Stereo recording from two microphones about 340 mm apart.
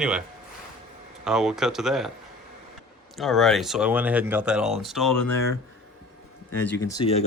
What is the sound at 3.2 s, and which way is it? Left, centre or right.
Speech, centre.